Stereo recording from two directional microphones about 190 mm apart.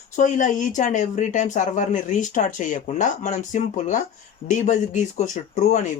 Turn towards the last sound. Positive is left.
turn(degrees=40)  # may be behind; listen again after turning